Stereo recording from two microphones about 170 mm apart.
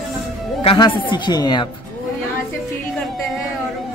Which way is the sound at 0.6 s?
25° left (ahead or behind).